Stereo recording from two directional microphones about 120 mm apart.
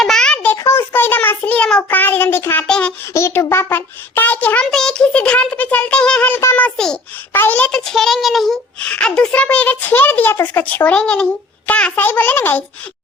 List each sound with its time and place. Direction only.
0.0 s a sound: 5° left (ahead or behind)
0.5 s child singing: 25° left (ahead or behind)
2.6 s a child's voice: 5° left (ahead or behind)
3.1 s a child's voice: 20° left (ahead or behind)